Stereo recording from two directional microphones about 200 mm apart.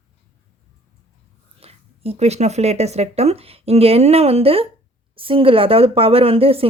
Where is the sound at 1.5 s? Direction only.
30° right (ahead or behind).